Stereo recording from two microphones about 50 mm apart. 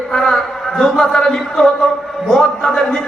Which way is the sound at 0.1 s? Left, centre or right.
Centre.